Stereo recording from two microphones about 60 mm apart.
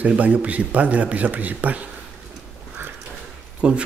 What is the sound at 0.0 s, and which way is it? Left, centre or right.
A man's voice, right.